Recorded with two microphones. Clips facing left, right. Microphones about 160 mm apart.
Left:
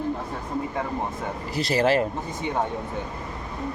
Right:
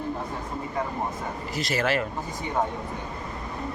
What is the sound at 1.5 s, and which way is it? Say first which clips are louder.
Speech: left 5 dB; 35° left (ahead or behind).